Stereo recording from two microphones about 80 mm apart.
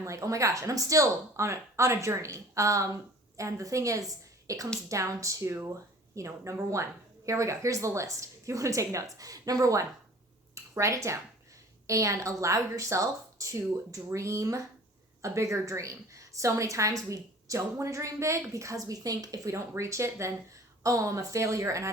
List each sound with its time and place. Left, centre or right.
0.0 s a woman's voice: right